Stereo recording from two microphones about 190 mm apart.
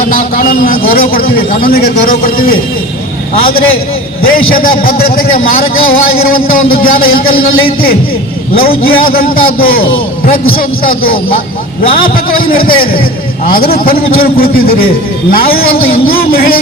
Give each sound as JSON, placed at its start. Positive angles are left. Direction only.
{"t": 0.1, "sound": "a man's voice", "side_deg": 45}
{"t": 4.2, "sound": "a man's voice", "side_deg": 50}
{"t": 8.9, "sound": "a man's voice", "side_deg": 50}
{"t": 12.5, "sound": "a man's voice", "side_deg": 50}